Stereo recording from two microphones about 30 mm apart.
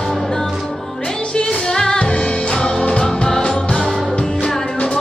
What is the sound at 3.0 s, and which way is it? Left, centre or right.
Music, centre.